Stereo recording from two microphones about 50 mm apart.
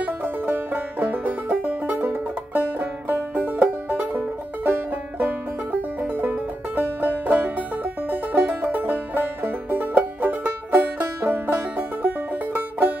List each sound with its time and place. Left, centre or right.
0.0 s banjo: right
3.9 s music: right